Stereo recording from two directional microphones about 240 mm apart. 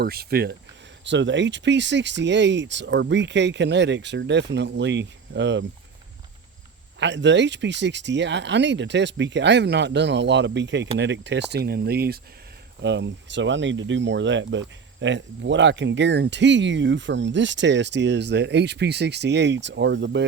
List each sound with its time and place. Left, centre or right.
0.0 s speech: right
7.0 s speech: right